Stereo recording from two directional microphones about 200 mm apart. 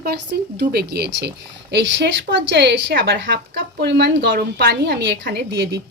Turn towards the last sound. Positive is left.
turn(degrees=-55)  # may be behind; listen again after turning